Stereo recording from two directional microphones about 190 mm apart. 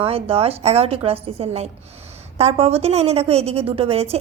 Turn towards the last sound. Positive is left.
turn(degrees=-30)  # may be behind; listen again after turning